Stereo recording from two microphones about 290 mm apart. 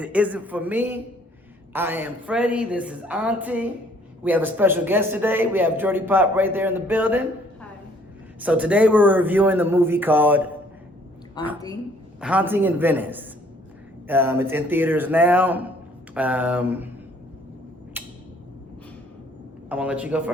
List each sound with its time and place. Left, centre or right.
0.0 s a man's voice: centre
8.4 s a man's voice: centre
11.4 s a woman's voice: centre
12.2 s a man's voice: centre
18.0 s a sound: centre
19.6 s a man's voice: centre